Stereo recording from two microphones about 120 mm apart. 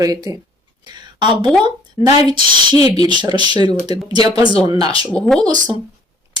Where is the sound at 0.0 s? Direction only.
30° right (ahead or behind).